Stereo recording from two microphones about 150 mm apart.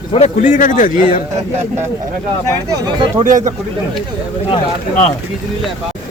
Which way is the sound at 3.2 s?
60° right (ahead or behind).